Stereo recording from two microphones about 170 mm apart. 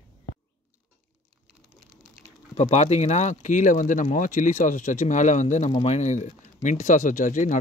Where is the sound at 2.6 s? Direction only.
40° left (ahead or behind).